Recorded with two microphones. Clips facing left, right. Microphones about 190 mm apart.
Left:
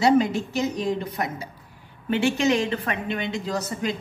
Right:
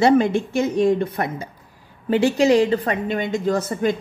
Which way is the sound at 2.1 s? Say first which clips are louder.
Right 5 dB; 35° right (ahead or behind).